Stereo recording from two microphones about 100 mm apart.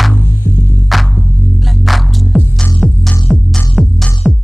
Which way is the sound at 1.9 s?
Centre (ahead or behind).